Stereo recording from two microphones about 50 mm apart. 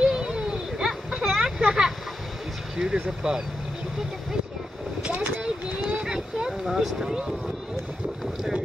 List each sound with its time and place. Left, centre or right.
0.0 s a sound: centre
2.8 s speech: centre
5.9 s boat: centre
6.6 s speech: centre